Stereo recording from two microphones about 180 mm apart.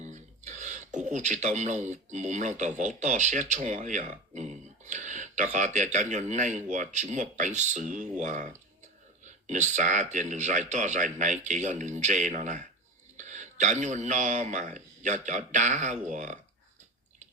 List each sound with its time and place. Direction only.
0.0 s speech: 40° right (ahead or behind)